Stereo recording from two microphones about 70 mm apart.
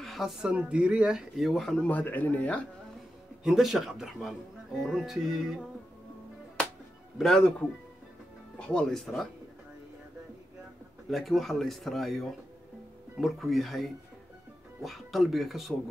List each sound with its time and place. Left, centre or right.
0.0 s a woman's voice: centre
1.3 s speech: centre
1.9 s speech: left
3.4 s speech: centre
7.2 s speech: centre
8.5 s speech: centre
8.8 s speech: centre
11.1 s speech: centre